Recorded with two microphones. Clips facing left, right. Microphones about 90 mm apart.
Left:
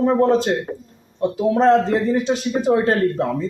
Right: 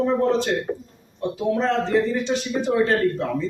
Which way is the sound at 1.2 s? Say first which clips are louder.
Left 6 dB; 40° left (ahead or behind).